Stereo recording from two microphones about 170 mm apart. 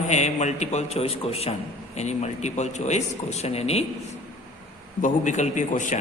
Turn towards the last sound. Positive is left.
turn(degrees=45)  # may be behind; listen again after turning